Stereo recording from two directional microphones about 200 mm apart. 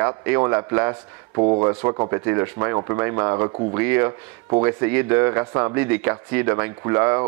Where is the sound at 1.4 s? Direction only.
30° right (ahead or behind).